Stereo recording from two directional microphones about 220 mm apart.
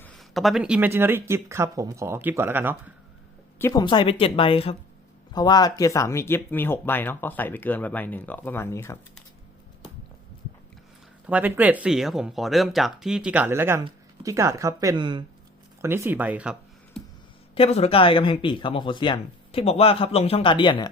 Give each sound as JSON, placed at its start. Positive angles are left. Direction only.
{"t": 0.0, "sound": "speech", "side_deg": 5}
{"t": 3.6, "sound": "speech", "side_deg": 15}
{"t": 11.3, "sound": "speech", "side_deg": -5}
{"t": 16.9, "sound": "a sound", "side_deg": 5}
{"t": 17.5, "sound": "speech", "side_deg": 25}